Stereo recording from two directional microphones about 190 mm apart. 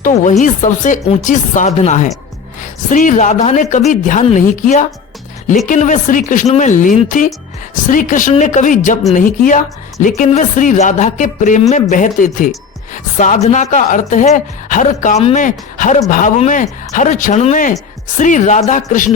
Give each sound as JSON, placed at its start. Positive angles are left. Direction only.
{"t": 0.0, "sound": "speech", "side_deg": 40}